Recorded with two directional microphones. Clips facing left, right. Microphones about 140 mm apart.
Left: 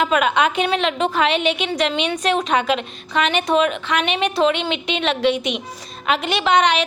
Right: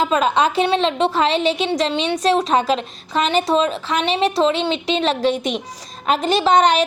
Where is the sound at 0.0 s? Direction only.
30° right (ahead or behind).